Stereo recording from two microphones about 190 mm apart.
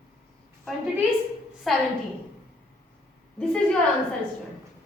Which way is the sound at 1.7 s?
Centre (ahead or behind).